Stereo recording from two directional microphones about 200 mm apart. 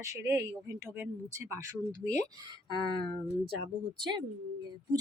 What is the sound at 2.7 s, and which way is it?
Speech, 25° left (ahead or behind).